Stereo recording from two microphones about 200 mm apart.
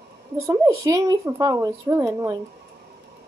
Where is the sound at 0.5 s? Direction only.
15° right (ahead or behind).